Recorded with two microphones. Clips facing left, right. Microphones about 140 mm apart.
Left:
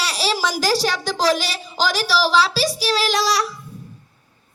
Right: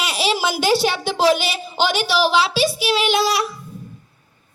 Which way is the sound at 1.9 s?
35° left (ahead or behind).